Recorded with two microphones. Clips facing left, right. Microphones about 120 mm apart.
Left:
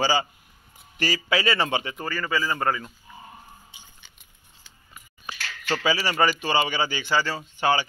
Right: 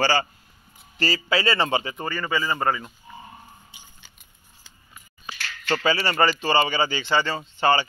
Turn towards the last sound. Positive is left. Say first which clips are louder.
# right 2 dB
turn(degrees=10)  # may be behind; listen again after turning